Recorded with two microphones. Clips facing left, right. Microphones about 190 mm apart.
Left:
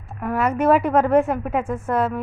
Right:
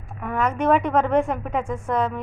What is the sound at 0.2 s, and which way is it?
A woman's voice, 5° left (ahead or behind).